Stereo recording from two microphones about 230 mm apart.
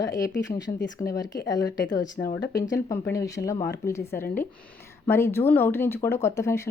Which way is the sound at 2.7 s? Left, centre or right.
Centre.